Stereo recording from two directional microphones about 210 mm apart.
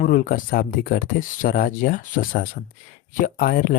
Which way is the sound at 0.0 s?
40° left (ahead or behind).